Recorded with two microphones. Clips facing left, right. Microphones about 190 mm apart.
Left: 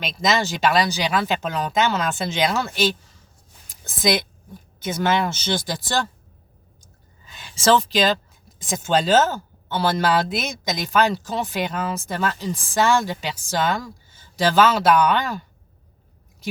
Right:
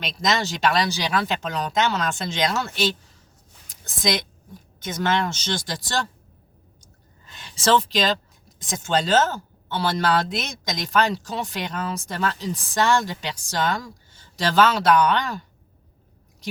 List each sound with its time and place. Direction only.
0.0 s speech: 5° left (ahead or behind)
7.3 s speech: 5° left (ahead or behind)